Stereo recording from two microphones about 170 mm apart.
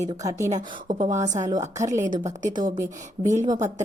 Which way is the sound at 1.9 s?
45° right (ahead or behind).